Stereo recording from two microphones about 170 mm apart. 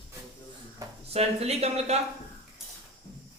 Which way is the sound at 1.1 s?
35° right (ahead or behind).